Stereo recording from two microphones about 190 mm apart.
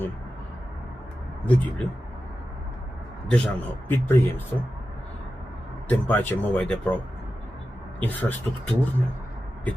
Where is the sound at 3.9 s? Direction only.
10° left (ahead or behind).